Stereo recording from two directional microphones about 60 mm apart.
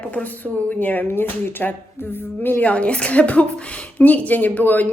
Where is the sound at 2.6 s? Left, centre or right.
Left.